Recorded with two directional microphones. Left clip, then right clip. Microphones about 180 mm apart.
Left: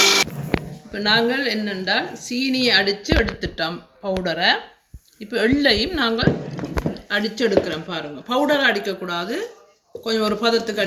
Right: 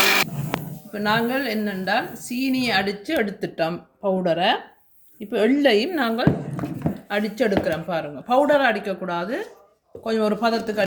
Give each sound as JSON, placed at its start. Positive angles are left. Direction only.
{"t": 0.9, "sound": "a woman's voice", "side_deg": -65}